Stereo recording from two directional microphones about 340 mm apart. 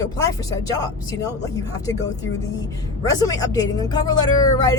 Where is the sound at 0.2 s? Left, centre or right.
Centre.